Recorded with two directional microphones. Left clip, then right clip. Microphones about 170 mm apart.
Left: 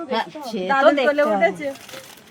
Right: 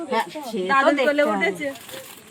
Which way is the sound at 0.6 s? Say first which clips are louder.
Left 2 dB; 75° left (ahead or behind).